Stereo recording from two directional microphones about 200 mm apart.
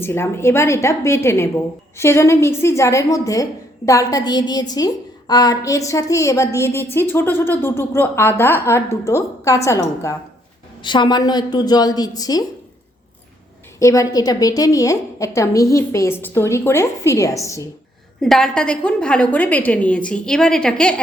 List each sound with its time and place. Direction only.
0.0 s a woman's voice: 10° left (ahead or behind)
13.7 s a woman's voice: 15° left (ahead or behind)
18.2 s a woman's voice: centre (ahead or behind)